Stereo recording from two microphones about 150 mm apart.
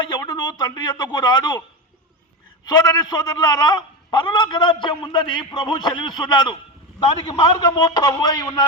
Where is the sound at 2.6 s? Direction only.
25° left (ahead or behind).